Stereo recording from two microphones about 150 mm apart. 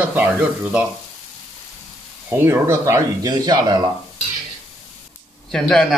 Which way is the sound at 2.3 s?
15° right (ahead or behind).